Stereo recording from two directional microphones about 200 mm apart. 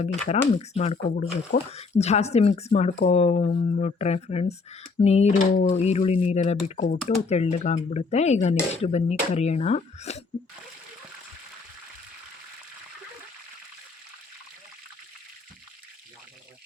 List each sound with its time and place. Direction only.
0.0 s speech: 35° left (ahead or behind)